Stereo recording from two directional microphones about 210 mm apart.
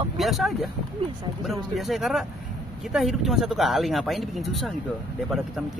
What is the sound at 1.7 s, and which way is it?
Speech, centre (ahead or behind).